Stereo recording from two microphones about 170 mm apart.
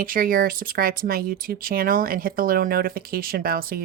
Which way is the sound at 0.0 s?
55° right (ahead or behind).